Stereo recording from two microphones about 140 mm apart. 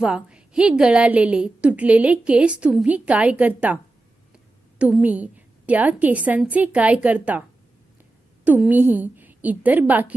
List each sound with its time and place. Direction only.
0.0 s a woman's voice: 5° right (ahead or behind)
4.8 s a woman's voice: 10° right (ahead or behind)
8.4 s a woman's voice: 10° right (ahead or behind)